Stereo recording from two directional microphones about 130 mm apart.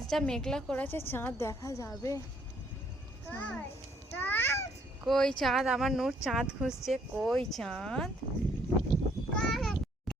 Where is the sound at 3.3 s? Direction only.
10° left (ahead or behind).